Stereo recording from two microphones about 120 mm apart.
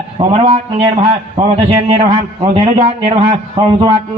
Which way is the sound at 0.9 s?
55° right (ahead or behind).